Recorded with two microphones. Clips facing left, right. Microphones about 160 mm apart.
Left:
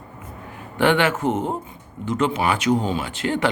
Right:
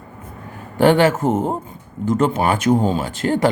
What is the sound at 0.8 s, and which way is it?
Speech, 40° right (ahead or behind).